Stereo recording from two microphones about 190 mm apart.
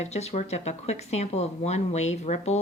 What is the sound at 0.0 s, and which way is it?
Speech, 35° left (ahead or behind).